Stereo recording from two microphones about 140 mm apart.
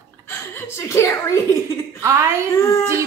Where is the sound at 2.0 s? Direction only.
20° right (ahead or behind).